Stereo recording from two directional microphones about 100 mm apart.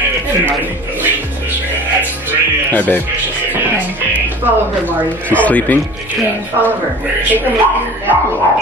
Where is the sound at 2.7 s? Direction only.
15° left (ahead or behind).